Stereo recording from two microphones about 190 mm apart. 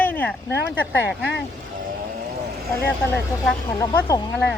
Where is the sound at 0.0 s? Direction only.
10° left (ahead or behind).